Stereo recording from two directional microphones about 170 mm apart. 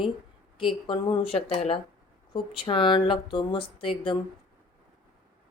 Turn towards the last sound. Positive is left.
turn(degrees=30)  # may be behind; listen again after turning